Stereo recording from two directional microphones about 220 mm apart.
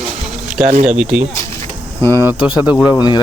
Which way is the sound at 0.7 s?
30° right (ahead or behind).